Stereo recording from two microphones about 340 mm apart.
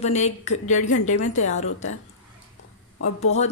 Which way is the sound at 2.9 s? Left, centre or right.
Left.